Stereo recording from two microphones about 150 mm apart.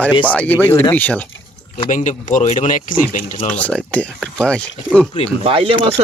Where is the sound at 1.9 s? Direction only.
60° left (ahead or behind).